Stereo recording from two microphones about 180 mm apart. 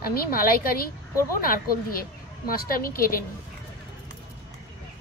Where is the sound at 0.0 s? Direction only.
55° left (ahead or behind).